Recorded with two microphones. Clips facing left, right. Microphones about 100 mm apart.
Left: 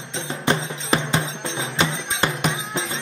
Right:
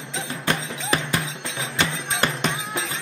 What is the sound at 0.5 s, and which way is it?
Music, 25° left (ahead or behind).